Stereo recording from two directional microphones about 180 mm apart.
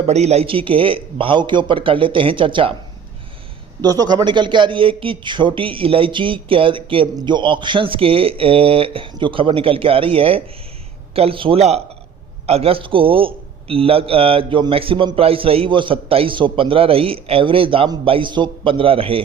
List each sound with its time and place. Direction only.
0.1 s a man's voice: 35° right (ahead or behind)
3.8 s a man's voice: 20° right (ahead or behind)